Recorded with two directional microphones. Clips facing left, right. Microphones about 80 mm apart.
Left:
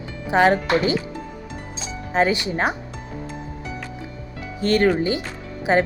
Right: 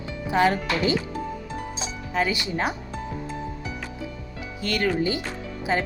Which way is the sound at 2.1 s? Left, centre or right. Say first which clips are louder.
Left 6 dB; left.